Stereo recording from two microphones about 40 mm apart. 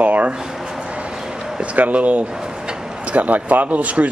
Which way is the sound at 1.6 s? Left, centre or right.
Right.